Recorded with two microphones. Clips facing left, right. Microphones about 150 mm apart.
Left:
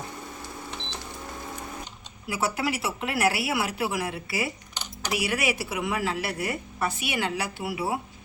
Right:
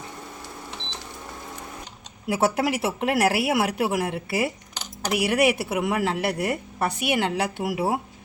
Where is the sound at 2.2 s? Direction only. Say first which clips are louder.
Right 5 dB; 60° right (ahead or behind).